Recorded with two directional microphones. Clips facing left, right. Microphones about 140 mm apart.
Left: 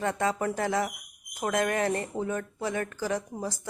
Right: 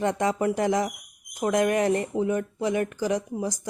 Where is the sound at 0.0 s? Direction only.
20° right (ahead or behind).